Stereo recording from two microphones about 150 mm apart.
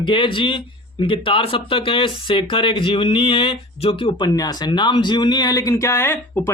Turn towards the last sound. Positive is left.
turn(degrees=15)  # may be behind; listen again after turning